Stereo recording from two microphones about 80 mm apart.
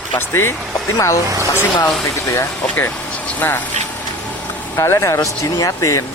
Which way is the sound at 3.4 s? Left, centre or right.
Left.